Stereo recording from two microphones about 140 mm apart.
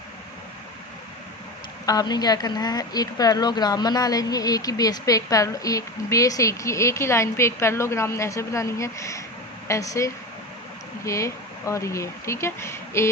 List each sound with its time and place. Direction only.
1.9 s speech: 30° left (ahead or behind)